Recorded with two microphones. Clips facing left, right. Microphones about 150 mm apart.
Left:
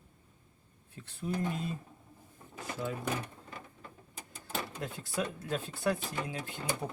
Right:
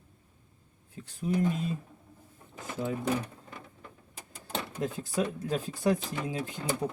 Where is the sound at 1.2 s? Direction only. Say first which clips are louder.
Right 6 dB; 10° right (ahead or behind).